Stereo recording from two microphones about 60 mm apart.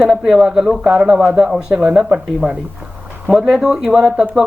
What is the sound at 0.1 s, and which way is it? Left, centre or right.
Speech, centre.